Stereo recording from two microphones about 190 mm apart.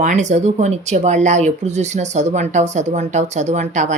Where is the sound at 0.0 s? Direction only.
40° right (ahead or behind).